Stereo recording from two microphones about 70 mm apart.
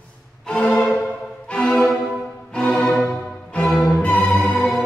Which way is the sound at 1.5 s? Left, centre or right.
Centre.